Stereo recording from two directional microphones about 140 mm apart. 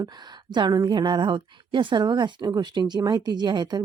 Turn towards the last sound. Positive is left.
turn(degrees=-30)  # may be behind; listen again after turning